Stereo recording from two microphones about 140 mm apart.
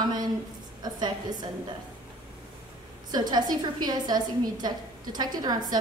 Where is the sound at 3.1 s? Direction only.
30° right (ahead or behind).